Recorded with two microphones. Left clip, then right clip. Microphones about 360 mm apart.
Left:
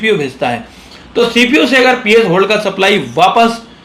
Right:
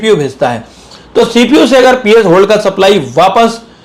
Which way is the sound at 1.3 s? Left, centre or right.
Right.